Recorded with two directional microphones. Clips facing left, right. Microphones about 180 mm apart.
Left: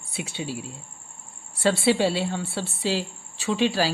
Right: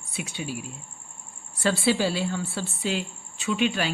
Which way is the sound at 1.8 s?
25° left (ahead or behind).